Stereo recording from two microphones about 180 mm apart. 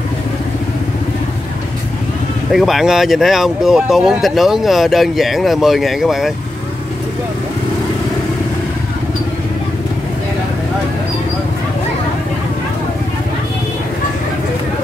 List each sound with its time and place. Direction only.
2.5 s speech: centre (ahead or behind)